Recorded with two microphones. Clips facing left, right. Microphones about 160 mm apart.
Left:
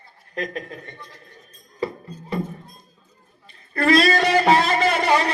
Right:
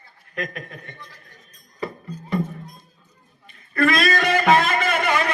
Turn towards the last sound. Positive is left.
turn(degrees=35)  # may be behind; listen again after turning